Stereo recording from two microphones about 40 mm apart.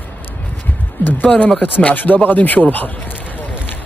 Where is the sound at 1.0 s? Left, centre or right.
Left.